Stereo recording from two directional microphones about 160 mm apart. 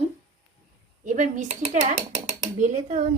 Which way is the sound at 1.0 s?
50° right (ahead or behind).